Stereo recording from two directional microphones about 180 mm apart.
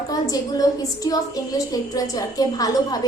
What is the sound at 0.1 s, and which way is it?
A woman's voice, 20° left (ahead or behind).